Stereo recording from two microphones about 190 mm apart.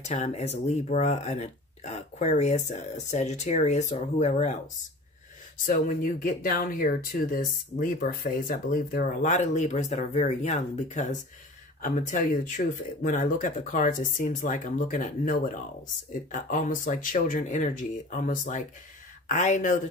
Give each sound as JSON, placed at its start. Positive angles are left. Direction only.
{"t": 0.1, "sound": "speech", "side_deg": 35}
{"t": 5.7, "sound": "speech", "side_deg": 45}